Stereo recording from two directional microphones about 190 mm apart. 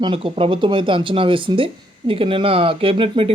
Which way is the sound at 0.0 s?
30° right (ahead or behind).